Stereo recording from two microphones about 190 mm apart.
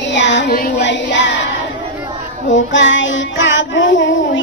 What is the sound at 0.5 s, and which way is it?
Music, 45° left (ahead or behind).